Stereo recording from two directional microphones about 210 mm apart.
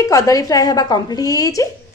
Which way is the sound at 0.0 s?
15° left (ahead or behind).